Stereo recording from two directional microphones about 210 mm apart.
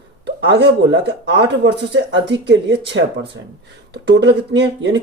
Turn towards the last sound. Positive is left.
turn(degrees=-55)  # may be behind; listen again after turning